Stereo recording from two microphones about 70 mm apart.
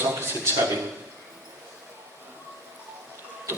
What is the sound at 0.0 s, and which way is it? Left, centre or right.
Speech, right.